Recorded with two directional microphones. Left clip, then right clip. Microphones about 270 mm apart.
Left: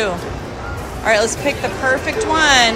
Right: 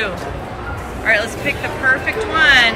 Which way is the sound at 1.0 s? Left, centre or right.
Centre.